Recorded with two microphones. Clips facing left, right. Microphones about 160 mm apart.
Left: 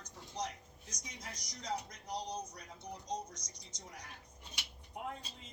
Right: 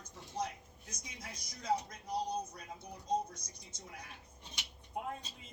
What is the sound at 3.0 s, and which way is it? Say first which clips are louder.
A woman's voice: right 8 dB; 55° right (ahead or behind).